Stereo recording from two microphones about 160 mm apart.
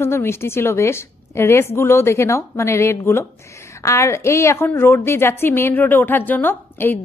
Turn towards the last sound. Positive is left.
turn(degrees=10)  # may be behind; listen again after turning